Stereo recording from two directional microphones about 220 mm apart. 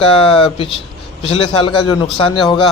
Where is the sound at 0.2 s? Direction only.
25° left (ahead or behind).